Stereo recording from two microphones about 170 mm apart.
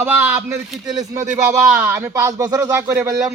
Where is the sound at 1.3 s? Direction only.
10° right (ahead or behind).